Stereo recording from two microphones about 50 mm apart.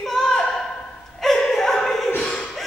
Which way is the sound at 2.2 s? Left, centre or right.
Left.